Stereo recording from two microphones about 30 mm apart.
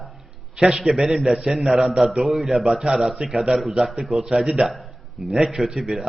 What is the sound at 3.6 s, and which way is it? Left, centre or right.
A man's voice, centre.